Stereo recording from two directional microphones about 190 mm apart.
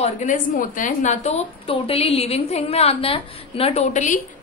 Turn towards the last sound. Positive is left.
turn(degrees=40)  # may be behind; listen again after turning